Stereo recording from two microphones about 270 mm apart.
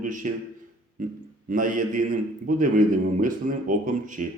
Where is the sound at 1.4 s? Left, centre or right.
Right.